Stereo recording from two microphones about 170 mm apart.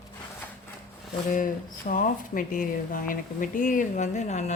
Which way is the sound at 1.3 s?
50° left (ahead or behind).